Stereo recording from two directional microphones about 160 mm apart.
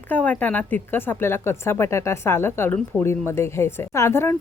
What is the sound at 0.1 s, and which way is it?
Speech, 10° left (ahead or behind).